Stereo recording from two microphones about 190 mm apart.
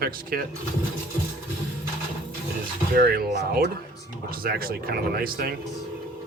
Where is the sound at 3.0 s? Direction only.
55° right (ahead or behind).